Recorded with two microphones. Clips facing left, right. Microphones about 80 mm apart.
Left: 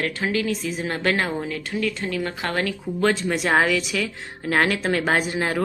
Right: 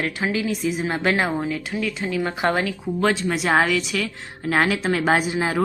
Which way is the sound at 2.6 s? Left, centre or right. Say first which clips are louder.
Even; centre.